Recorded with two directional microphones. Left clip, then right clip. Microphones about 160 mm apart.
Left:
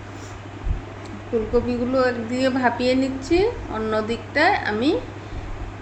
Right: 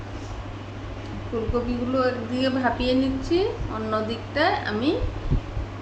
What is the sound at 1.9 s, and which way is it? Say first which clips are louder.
A woman's voice: left 2 dB; 20° left (ahead or behind).